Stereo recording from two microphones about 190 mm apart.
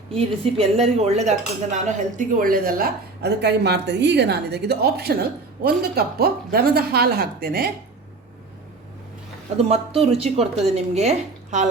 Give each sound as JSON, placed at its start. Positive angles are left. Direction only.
{"t": 0.1, "sound": "speech", "side_deg": -30}
{"t": 9.6, "sound": "speech", "side_deg": -30}